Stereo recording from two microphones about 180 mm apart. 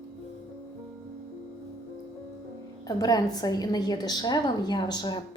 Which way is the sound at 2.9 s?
20° left (ahead or behind).